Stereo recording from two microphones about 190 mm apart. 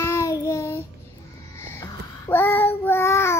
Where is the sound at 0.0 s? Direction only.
15° left (ahead or behind).